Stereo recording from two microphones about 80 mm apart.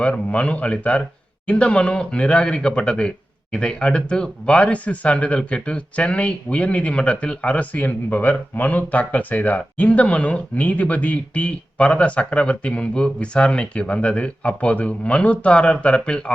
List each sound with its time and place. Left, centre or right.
0.0 s speech: centre